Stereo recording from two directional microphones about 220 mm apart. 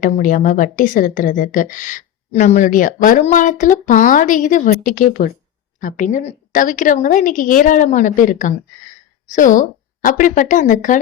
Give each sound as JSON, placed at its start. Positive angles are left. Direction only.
{"t": 0.0, "sound": "a woman's voice", "side_deg": 40}